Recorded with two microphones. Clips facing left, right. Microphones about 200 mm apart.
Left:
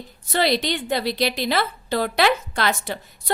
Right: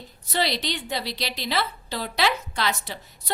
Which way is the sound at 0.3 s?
50° left (ahead or behind).